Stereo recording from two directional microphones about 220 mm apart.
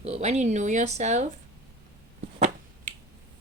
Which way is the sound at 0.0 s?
30° right (ahead or behind).